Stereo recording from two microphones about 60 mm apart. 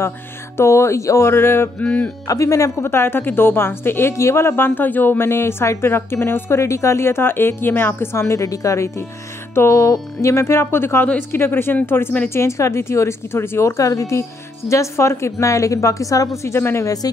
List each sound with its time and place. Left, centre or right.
0.6 s a woman's voice: left
1.8 s speech: left
2.2 s a woman's voice: left
8.4 s a woman's voice: left
12.4 s a woman's voice: left
16.5 s speech: left
16.8 s speech: left